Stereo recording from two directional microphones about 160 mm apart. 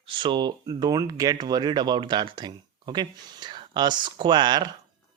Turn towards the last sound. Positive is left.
turn(degrees=-25)  # may be behind; listen again after turning